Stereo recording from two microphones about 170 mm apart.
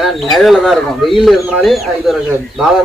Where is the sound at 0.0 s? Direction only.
Centre (ahead or behind).